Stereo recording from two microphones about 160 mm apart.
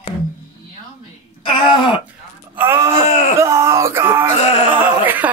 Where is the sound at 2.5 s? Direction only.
15° right (ahead or behind).